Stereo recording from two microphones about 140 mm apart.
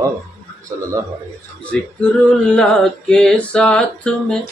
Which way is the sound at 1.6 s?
10° left (ahead or behind).